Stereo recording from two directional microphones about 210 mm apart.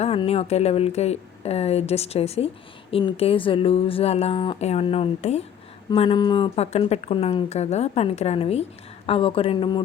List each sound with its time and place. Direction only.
0.0 s speech: 25° left (ahead or behind)